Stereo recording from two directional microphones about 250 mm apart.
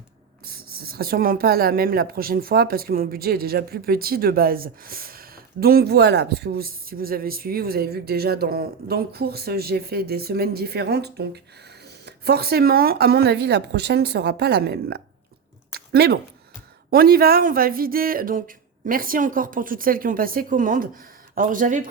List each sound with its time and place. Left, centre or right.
0.4 s speech: right
15.7 s a sound: right
16.9 s speech: right